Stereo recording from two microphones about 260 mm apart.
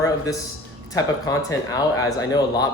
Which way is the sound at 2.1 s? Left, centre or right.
Centre.